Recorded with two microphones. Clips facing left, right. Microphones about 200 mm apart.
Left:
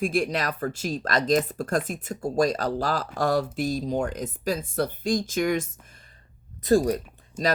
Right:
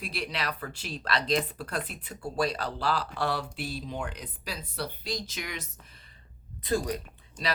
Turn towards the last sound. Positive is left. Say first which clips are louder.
# left 8 dB
turn(degrees=10)  # may be behind; listen again after turning